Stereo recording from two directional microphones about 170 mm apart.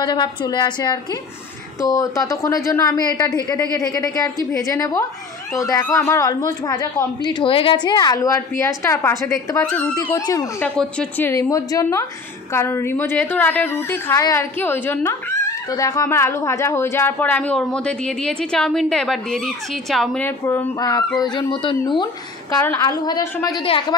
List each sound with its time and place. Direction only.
0.0 s a woman's voice: 25° left (ahead or behind); by 9.9 s 10° left (ahead or behind)
10.0 s speech: 20° left (ahead or behind)
10.8 s a woman's voice: 10° left (ahead or behind)
20.2 s a woman's voice: 15° left (ahead or behind); by 24.0 s 30° left (ahead or behind)